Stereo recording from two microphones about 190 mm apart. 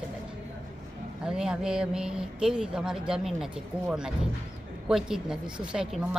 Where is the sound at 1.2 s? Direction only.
5° right (ahead or behind).